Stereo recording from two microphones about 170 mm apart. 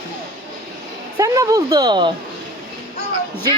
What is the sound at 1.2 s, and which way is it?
Speech, 20° right (ahead or behind).